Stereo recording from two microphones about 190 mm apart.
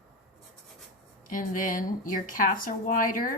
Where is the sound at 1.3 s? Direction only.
45° left (ahead or behind).